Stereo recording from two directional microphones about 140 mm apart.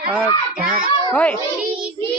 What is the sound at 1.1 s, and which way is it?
Speech, 10° left (ahead or behind).